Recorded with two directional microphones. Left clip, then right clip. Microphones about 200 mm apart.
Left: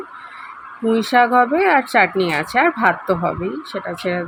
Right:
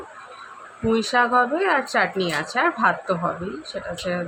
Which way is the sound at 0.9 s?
20° left (ahead or behind).